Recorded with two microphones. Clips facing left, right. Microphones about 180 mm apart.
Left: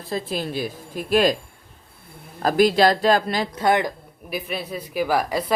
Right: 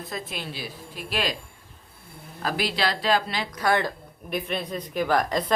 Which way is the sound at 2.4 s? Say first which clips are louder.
Left 10 dB; 45° left (ahead or behind).